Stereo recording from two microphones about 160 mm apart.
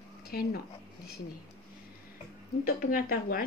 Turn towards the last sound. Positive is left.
turn(degrees=65)  # may be behind; listen again after turning